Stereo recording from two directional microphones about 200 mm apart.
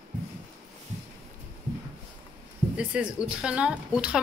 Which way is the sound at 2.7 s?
5° right (ahead or behind).